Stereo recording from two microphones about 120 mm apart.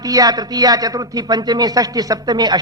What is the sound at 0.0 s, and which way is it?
A man's voice, 30° right (ahead or behind).